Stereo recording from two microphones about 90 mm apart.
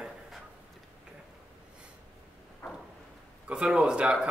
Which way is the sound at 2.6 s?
25° left (ahead or behind).